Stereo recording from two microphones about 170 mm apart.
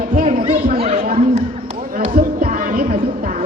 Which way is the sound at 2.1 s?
60° right (ahead or behind).